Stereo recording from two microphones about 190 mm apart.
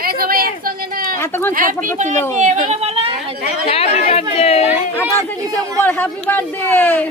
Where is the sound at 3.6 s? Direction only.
30° left (ahead or behind).